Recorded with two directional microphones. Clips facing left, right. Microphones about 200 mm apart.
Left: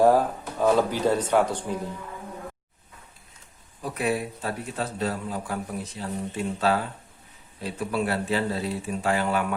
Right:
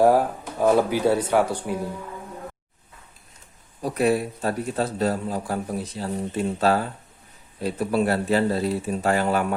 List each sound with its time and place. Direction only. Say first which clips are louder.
0.0 s speech: right 1 dB; 10° right (ahead or behind)
3.8 s a man's voice: right 5 dB; 40° right (ahead or behind)